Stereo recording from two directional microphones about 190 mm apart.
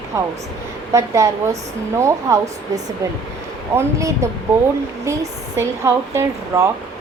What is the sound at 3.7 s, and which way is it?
Speech, 15° right (ahead or behind).